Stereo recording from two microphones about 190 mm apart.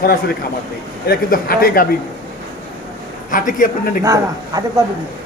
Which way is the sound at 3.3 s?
45° left (ahead or behind).